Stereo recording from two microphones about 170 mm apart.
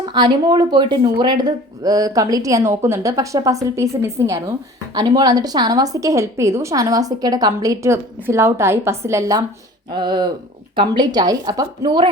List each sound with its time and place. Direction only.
0.0 s a woman's voice: 25° right (ahead or behind)